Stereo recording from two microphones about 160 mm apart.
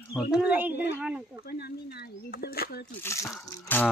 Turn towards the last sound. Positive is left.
turn(degrees=10)  # may be behind; listen again after turning